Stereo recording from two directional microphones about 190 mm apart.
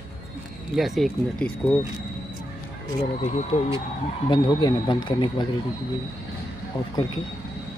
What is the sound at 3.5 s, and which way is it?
Speech, 30° left (ahead or behind).